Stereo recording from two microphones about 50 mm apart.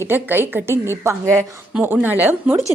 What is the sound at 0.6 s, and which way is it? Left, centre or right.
Speech, right.